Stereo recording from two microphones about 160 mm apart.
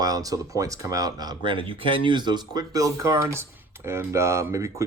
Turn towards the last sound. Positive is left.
turn(degrees=-20)  # may be behind; listen again after turning